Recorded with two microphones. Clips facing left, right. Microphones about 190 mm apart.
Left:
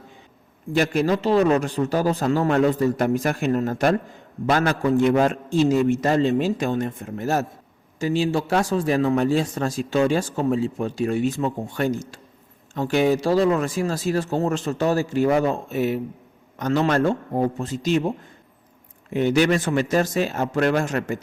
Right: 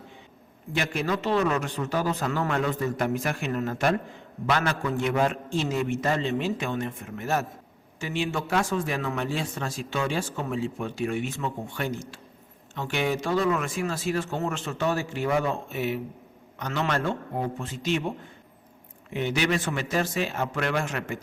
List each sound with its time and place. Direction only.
0.7 s a man's voice: 40° left (ahead or behind)
19.1 s a man's voice: 45° left (ahead or behind)